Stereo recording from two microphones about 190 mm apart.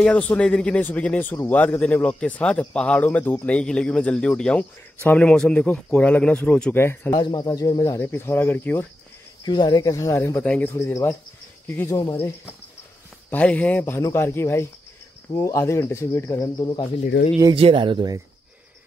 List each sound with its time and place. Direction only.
0.0 s speech: 5° left (ahead or behind)
7.2 s speech: 25° left (ahead or behind)
9.4 s speech: 20° left (ahead or behind)
12.0 s speech: 25° left (ahead or behind)
13.3 s speech: 5° left (ahead or behind)
17.1 s speech: 65° left (ahead or behind)
17.6 s speech: 25° right (ahead or behind)